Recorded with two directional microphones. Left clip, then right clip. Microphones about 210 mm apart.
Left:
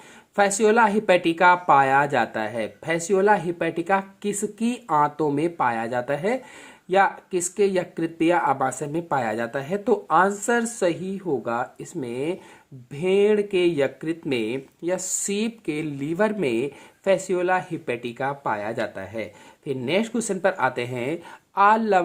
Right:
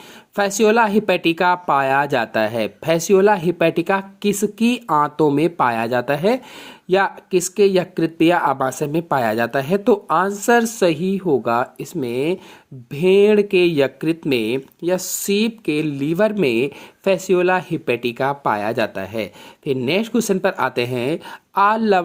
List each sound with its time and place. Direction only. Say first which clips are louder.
0.3 s speech: right 3 dB; 25° right (ahead or behind)